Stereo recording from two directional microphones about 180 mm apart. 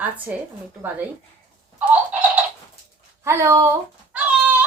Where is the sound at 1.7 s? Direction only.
10° right (ahead or behind).